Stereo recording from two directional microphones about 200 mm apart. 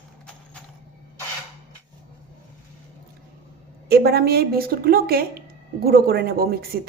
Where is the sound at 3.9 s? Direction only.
50° right (ahead or behind).